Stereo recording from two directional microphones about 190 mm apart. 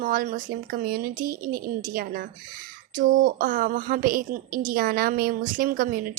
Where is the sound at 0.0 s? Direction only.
45° right (ahead or behind).